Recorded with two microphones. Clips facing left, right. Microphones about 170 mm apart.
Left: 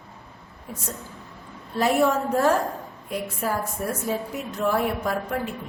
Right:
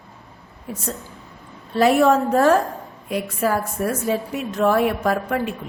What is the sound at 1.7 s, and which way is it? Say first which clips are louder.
A woman's voice: right 5 dB; 90° right.